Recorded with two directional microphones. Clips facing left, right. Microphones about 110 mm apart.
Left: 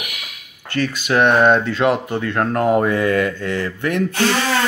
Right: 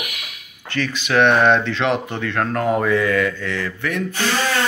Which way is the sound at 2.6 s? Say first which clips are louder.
Left 2 dB; 45° left (ahead or behind).